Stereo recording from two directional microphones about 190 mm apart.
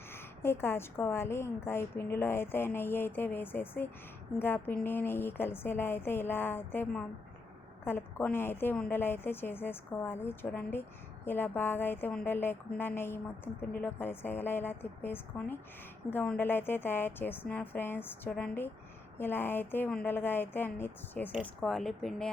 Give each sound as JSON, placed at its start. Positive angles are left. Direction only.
{"t": 0.1, "sound": "a woman's voice", "side_deg": 10}